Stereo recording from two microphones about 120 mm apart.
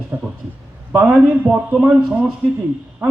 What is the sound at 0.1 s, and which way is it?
A man's voice, 15° right (ahead or behind).